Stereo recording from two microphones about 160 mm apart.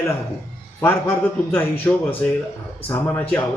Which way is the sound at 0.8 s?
15° left (ahead or behind).